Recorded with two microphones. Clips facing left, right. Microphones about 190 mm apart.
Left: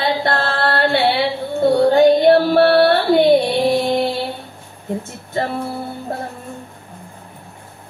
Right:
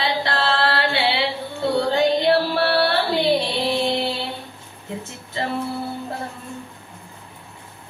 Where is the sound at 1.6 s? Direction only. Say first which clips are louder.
Left 8 dB; 45° left (ahead or behind).